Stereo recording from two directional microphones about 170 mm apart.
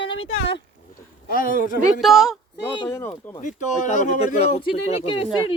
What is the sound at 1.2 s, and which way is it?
Speech, 55° left (ahead or behind).